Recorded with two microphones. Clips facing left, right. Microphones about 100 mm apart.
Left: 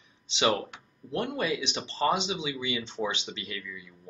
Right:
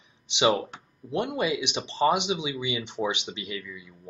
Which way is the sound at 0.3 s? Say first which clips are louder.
Right 3 dB; 20° right (ahead or behind).